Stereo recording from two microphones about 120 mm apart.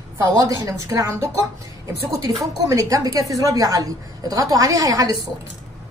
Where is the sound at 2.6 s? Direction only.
30° right (ahead or behind).